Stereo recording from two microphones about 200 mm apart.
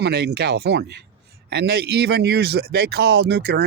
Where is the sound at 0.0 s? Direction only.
55° right (ahead or behind).